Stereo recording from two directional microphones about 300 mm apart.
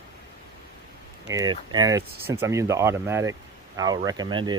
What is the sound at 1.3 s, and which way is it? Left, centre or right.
Speech, centre.